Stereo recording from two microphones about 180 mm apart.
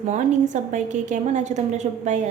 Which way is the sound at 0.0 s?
40° right (ahead or behind).